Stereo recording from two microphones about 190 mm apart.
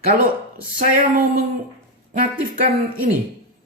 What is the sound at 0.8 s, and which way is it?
Speech, 50° right (ahead or behind).